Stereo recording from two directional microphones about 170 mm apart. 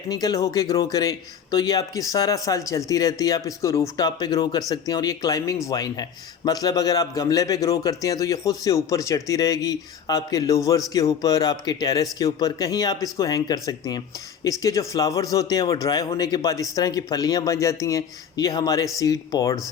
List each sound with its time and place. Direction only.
0.1 s a man's voice: 20° left (ahead or behind)